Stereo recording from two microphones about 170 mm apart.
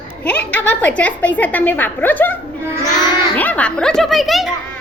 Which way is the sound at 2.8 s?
25° left (ahead or behind).